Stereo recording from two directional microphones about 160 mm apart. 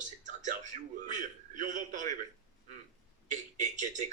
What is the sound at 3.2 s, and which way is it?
Speech, 50° right (ahead or behind).